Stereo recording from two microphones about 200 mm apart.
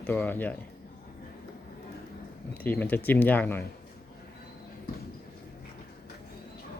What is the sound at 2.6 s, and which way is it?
Speech, 10° left (ahead or behind).